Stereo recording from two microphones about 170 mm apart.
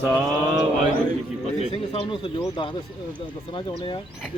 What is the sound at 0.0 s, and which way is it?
Mantra, 10° right (ahead or behind).